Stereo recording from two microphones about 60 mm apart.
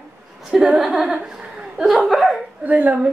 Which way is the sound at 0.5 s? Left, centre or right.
Centre.